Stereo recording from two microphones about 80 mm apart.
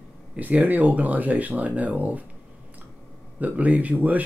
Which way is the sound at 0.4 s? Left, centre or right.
Right.